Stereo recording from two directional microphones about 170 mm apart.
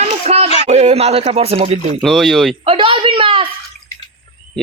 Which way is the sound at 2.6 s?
30° right (ahead or behind).